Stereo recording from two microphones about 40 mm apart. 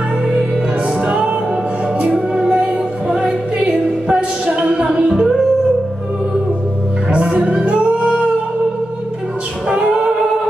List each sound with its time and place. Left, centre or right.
1.0 s music: right
2.0 s music: right
7.1 s music: right
9.7 s a capella: right